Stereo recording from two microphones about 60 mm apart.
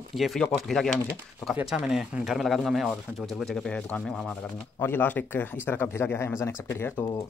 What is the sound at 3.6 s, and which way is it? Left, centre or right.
Speech, centre.